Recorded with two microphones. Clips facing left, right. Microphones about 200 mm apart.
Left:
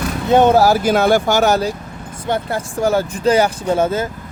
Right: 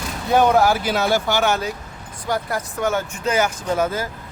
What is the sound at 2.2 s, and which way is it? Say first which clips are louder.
Speech: left 3 dB; 25° left (ahead or behind).